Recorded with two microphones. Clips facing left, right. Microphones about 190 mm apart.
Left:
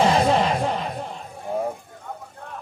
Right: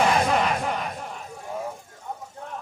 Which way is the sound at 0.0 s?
30° left (ahead or behind).